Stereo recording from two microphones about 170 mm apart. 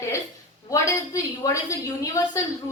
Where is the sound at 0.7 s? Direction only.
20° left (ahead or behind).